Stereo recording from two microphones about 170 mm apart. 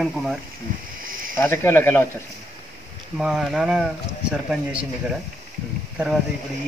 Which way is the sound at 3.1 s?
Centre (ahead or behind).